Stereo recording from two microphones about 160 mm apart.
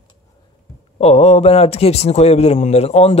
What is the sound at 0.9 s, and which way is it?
Speech, 40° left (ahead or behind).